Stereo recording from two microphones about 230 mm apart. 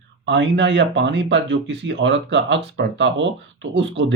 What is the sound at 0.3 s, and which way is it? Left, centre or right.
Speech, right.